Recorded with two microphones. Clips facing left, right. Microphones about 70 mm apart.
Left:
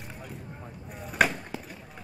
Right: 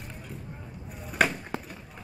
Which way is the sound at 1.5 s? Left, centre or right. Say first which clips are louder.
Right 3 dB; right.